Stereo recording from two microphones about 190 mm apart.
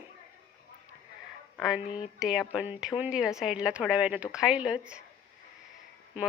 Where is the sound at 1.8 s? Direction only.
25° left (ahead or behind).